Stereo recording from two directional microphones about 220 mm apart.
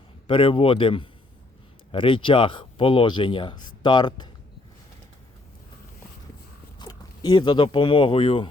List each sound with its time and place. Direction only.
0.3 s speech: 25° left (ahead or behind)
6.7 s speech: 20° left (ahead or behind)